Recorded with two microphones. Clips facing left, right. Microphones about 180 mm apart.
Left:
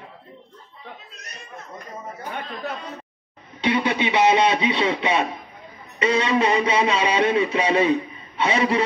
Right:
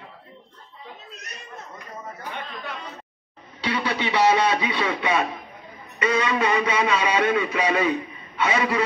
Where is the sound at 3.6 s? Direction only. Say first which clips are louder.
Left 4 dB; 20° left (ahead or behind).